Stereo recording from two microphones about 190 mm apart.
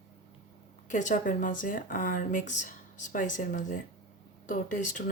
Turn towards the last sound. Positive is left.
turn(degrees=45)  # may be behind; listen again after turning